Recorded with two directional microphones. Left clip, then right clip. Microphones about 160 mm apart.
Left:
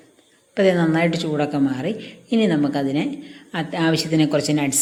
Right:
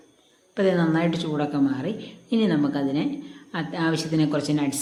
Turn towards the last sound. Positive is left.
turn(degrees=15)  # may be behind; listen again after turning